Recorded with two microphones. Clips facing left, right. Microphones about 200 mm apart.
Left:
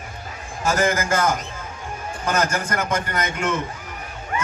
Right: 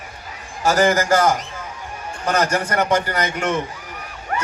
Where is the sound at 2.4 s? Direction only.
70° right (ahead or behind).